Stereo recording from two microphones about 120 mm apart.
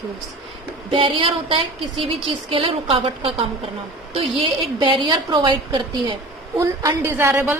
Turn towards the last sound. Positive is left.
turn(degrees=-20)  # may be behind; listen again after turning